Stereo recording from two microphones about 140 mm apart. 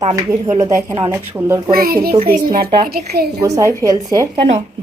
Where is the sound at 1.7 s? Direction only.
90° right.